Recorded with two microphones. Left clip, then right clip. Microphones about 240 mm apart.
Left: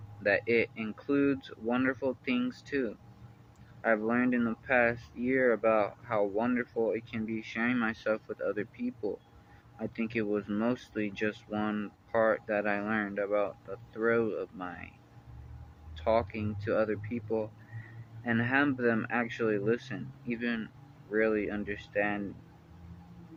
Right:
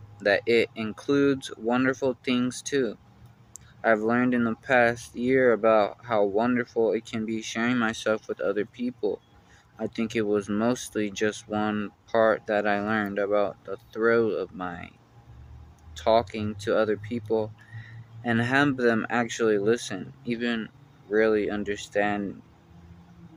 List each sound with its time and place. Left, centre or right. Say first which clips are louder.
0.2 s speech: right 5 dB; right
16.0 s speech: right 6 dB; right